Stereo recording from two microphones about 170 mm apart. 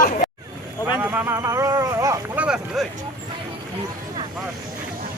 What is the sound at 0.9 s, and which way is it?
Speech, 10° right (ahead or behind).